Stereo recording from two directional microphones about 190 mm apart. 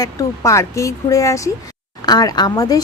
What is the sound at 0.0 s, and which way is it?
Speech, 15° left (ahead or behind).